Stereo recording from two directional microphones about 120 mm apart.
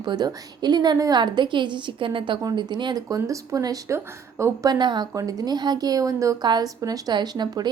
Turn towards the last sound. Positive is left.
turn(degrees=-35)  # may be behind; listen again after turning